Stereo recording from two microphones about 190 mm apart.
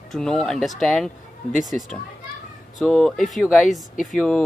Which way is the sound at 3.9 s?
45° left (ahead or behind).